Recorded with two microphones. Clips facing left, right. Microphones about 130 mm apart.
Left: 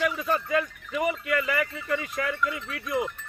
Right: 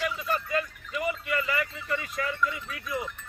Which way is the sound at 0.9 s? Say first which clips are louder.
Left 4 dB; 60° left (ahead or behind).